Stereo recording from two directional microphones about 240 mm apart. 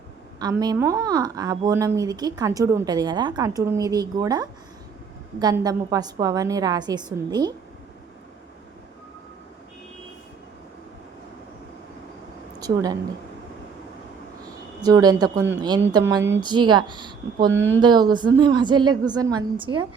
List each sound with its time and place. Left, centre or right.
0.3 s a woman's voice: centre
12.5 s speech: centre
14.8 s a woman's voice: centre